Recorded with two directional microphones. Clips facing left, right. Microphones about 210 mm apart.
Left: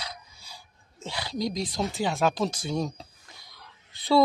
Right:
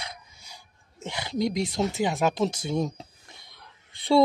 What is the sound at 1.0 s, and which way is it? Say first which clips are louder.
Speech: right 3 dB; 20° right (ahead or behind).